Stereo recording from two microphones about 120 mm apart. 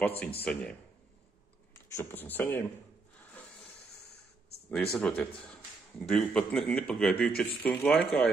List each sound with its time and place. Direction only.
0.0 s speech: 15° left (ahead or behind)
2.0 s speech: 15° left (ahead or behind)
4.6 s a man's voice: 5° left (ahead or behind)